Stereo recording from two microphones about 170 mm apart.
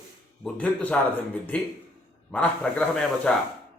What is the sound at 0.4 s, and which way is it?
Speech, 10° left (ahead or behind).